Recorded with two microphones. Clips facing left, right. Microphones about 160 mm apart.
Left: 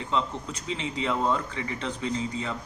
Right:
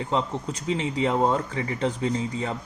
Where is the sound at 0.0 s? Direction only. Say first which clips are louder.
Right 3 dB; 40° right (ahead or behind).